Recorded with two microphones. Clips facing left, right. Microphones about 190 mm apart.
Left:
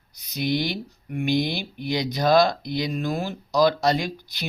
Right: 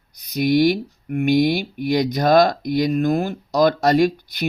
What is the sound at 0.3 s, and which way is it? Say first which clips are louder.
Speech: right 9 dB; 50° right (ahead or behind).